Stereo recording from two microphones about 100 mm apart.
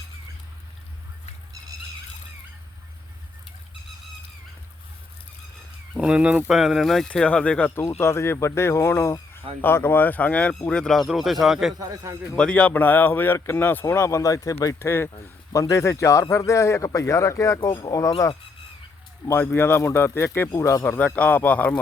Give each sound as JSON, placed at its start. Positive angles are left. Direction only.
{"t": 6.0, "sound": "speech", "side_deg": -10}
{"t": 7.9, "sound": "speech", "side_deg": 25}
{"t": 11.8, "sound": "a man's voice", "side_deg": -35}
{"t": 12.4, "sound": "speech", "side_deg": 10}
{"t": 19.5, "sound": "speech", "side_deg": 25}
{"t": 20.8, "sound": "speech", "side_deg": 15}